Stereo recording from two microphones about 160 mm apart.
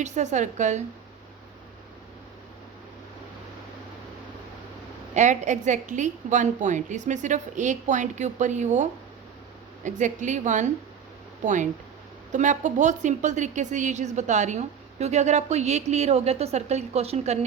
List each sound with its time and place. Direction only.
0.0 s a woman's voice: 45° right (ahead or behind)
5.1 s a woman's voice: 50° right (ahead or behind)